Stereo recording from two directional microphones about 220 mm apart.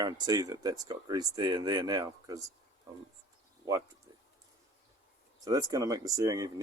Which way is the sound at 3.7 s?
15° right (ahead or behind).